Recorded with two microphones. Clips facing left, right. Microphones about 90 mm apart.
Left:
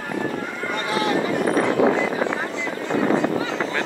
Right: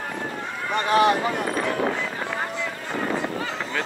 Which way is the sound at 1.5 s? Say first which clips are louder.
Left 6 dB; 80° left.